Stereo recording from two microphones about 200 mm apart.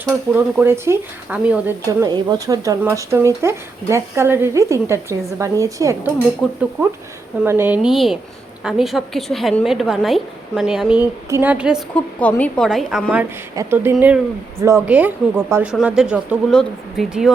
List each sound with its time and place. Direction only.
0.0 s speech: 10° right (ahead or behind)
1.9 s speech: 20° right (ahead or behind)
6.4 s a woman's voice: centre (ahead or behind)
12.2 s a woman's voice: 5° left (ahead or behind)